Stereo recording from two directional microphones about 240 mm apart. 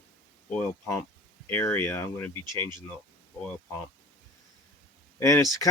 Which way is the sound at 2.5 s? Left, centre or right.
Centre.